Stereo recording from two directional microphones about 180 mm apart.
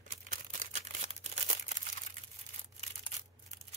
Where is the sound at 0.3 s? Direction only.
45° right (ahead or behind).